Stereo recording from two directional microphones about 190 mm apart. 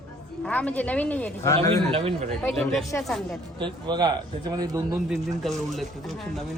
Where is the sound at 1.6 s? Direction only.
30° right (ahead or behind).